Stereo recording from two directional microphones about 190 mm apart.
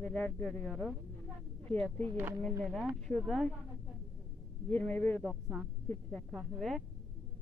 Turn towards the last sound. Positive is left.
turn(degrees=0)  # may be behind; listen again after turning